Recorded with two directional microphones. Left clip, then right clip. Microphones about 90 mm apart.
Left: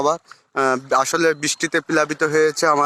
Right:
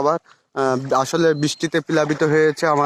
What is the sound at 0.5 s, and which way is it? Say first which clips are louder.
Speech: left 1 dB; 15° right (ahead or behind).